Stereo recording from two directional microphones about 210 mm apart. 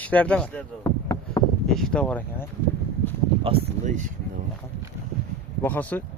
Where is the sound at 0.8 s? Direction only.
15° left (ahead or behind).